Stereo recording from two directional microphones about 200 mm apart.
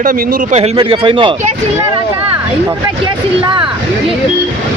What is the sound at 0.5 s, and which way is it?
Speech, 30° right (ahead or behind).